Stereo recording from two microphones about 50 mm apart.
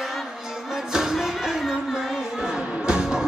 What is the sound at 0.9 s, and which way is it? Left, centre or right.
Music, centre.